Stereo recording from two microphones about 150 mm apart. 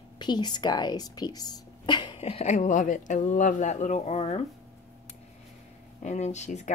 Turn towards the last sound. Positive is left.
turn(degrees=50)  # may be behind; listen again after turning